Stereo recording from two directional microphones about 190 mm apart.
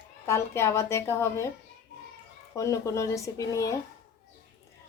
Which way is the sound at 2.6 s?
15° left (ahead or behind).